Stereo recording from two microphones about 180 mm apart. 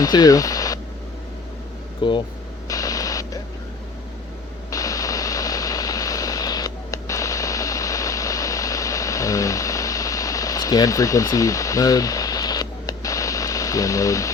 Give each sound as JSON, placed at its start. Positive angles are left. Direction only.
{"t": 0.0, "sound": "speech", "side_deg": 20}
{"t": 2.0, "sound": "speech", "side_deg": 25}
{"t": 2.6, "sound": "radio", "side_deg": 20}
{"t": 4.7, "sound": "vehicle", "side_deg": 20}